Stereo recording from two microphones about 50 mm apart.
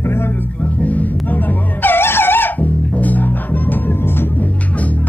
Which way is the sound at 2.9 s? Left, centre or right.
Left.